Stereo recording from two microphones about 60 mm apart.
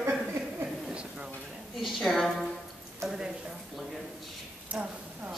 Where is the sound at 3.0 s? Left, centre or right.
Right.